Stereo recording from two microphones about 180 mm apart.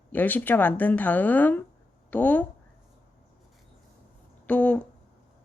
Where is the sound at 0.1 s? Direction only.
10° left (ahead or behind).